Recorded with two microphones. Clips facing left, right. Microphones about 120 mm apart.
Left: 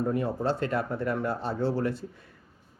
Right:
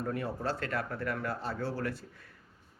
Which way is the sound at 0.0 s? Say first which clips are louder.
Left 7 dB; 20° left (ahead or behind).